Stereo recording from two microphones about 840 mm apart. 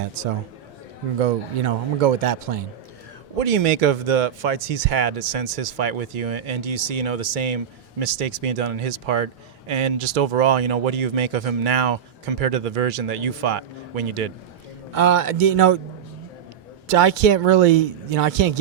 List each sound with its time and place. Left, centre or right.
0.2 s speech: right
16.9 s speech: right